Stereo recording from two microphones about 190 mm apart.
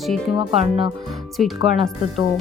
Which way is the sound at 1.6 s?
Centre (ahead or behind).